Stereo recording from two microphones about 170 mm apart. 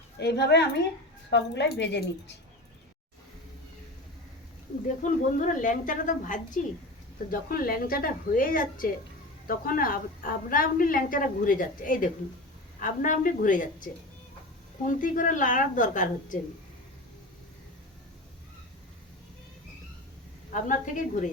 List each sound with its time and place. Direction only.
0.2 s a woman's voice: 75° left (ahead or behind)
1.3 s speech: 90° left
5.0 s a woman's voice: 50° left (ahead or behind)
20.5 s a woman's voice: 50° left (ahead or behind)